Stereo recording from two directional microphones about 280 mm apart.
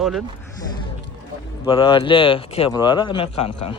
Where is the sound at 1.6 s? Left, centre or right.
Centre.